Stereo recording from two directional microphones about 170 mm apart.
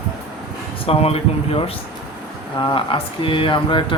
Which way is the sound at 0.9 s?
35° left (ahead or behind).